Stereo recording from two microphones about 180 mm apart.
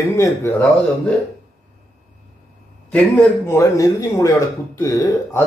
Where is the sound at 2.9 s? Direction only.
10° left (ahead or behind).